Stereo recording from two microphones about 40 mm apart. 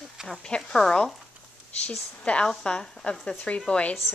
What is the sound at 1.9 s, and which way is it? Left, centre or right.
Speech, left.